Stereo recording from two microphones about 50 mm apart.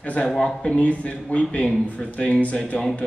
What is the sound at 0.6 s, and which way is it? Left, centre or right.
Speech, left.